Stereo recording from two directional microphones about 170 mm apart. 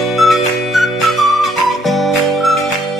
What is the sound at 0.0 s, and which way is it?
Music, centre (ahead or behind).